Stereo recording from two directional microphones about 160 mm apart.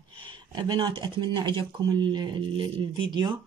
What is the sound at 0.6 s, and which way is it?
Speech, 30° right (ahead or behind).